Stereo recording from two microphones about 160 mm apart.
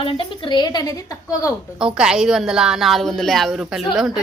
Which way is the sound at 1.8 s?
5° right (ahead or behind).